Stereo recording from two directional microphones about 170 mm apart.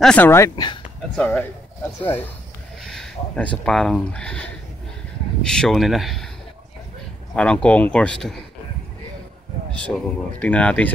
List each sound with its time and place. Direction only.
0.0 s speech: 10° left (ahead or behind)
7.3 s speech: 5° left (ahead or behind)
9.8 s speech: 5° left (ahead or behind)